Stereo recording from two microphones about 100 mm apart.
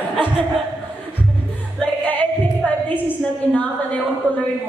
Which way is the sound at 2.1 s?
15° left (ahead or behind).